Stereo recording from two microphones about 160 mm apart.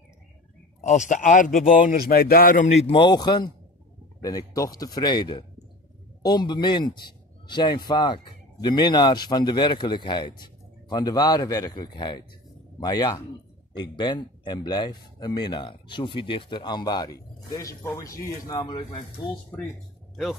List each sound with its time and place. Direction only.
0.7 s a man's voice: 50° left (ahead or behind)
2.9 s speech: 30° left (ahead or behind)